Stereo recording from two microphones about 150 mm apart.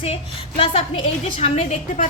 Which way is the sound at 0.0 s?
40° left (ahead or behind).